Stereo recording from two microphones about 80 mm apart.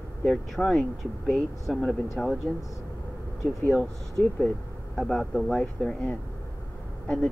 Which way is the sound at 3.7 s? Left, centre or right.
Centre.